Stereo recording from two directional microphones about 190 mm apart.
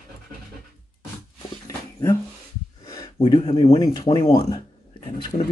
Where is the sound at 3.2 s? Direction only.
30° left (ahead or behind).